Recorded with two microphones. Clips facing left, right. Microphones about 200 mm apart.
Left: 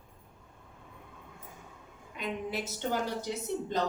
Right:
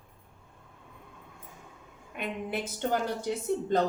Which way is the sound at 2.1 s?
55° right (ahead or behind).